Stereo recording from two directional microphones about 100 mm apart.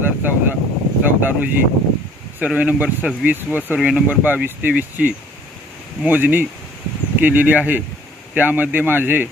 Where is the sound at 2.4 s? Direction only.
15° right (ahead or behind).